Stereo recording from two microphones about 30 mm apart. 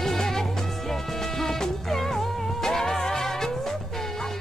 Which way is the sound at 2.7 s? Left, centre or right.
Centre.